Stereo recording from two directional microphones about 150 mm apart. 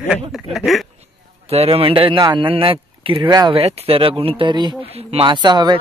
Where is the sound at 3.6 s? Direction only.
40° right (ahead or behind).